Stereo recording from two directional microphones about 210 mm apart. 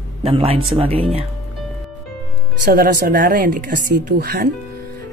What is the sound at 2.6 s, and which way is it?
Speech, 45° right (ahead or behind).